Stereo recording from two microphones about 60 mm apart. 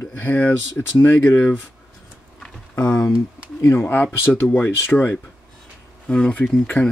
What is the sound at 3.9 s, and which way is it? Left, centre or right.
Speech, left.